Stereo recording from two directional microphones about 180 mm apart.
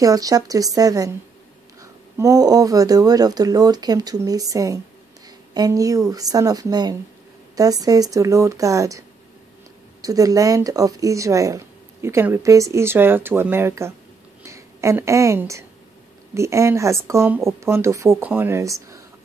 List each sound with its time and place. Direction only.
0.0 s speech: 20° right (ahead or behind)
10.0 s speech: 20° right (ahead or behind)